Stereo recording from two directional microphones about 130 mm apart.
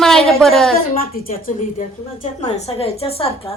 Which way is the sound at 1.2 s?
85° left.